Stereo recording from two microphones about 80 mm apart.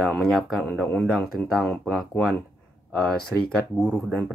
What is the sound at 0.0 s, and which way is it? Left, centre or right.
Speech, centre.